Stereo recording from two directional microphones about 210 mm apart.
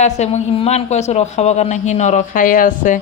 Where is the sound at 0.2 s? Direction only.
35° left (ahead or behind).